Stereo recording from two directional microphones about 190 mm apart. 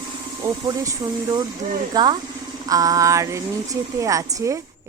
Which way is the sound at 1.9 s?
20° right (ahead or behind).